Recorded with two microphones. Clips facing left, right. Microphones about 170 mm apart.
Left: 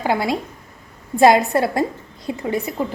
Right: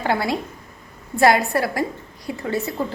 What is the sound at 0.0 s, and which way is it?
A woman's voice, 15° left (ahead or behind).